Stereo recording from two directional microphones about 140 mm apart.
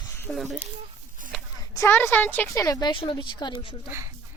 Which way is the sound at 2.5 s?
25° left (ahead or behind).